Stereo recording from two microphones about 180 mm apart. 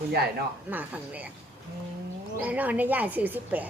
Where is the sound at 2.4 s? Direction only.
10° right (ahead or behind).